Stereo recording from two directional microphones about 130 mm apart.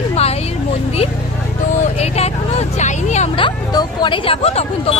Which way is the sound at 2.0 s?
55° left (ahead or behind).